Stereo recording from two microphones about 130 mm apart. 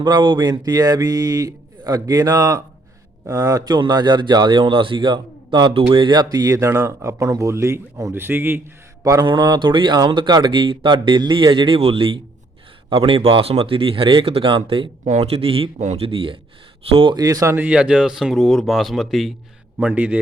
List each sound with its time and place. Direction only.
0.0 s a man's voice: 35° right (ahead or behind); by 8.6 s 15° right (ahead or behind)
9.2 s speech: 35° right (ahead or behind)
15.0 s speech: 55° right (ahead or behind)
17.2 s speech: 25° right (ahead or behind); by 19.3 s centre (ahead or behind)
19.8 s a man's voice: 10° right (ahead or behind)